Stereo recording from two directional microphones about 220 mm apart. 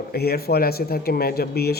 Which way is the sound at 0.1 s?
45° left (ahead or behind).